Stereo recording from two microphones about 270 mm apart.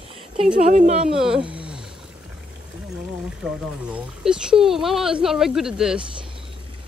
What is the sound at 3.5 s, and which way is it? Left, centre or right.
Speech, centre.